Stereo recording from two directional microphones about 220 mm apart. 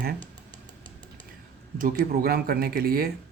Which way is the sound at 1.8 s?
45° right (ahead or behind).